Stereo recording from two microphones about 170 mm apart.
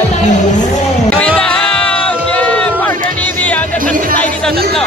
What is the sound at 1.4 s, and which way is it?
Music, 5° left (ahead or behind).